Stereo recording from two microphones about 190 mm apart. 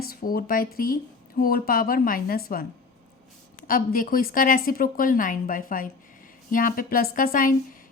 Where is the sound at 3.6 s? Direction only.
50° left (ahead or behind).